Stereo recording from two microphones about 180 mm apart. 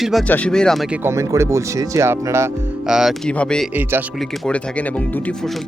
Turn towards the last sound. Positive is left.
turn(degrees=5)  # may be behind; listen again after turning